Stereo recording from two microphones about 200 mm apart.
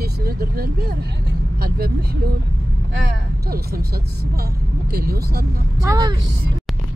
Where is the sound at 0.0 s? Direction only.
50° right (ahead or behind).